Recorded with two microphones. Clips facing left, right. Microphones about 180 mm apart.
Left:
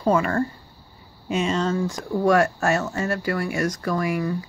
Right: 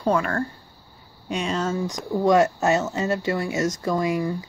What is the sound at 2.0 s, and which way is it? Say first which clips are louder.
Speech: right 1 dB; 20° right (ahead or behind).